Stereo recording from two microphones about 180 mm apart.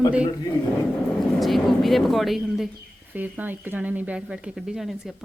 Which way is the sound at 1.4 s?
Centre (ahead or behind).